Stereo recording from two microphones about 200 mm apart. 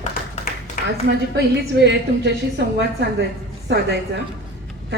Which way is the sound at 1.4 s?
55° right (ahead or behind).